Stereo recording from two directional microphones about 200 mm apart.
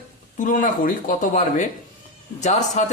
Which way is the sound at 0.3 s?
40° left (ahead or behind).